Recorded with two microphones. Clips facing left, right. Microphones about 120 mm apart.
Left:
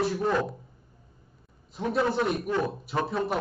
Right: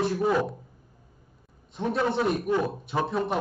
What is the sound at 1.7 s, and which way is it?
Speech, centre (ahead or behind).